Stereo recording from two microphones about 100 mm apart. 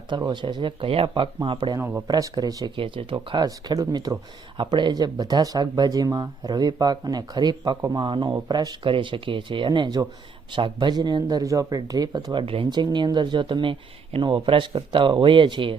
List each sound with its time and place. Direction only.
0.1 s speech: 45° right (ahead or behind)
1.8 s speech: 20° right (ahead or behind)
2.0 s speech: 40° right (ahead or behind)
2.7 s speech: 60° right (ahead or behind)
3.4 s speech: 40° right (ahead or behind)
12.4 s speech: 60° right (ahead or behind)